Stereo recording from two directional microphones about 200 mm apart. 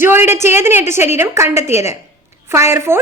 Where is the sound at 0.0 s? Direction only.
10° right (ahead or behind).